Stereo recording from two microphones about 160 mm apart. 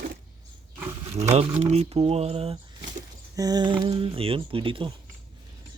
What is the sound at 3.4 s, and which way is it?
Speech, 25° right (ahead or behind).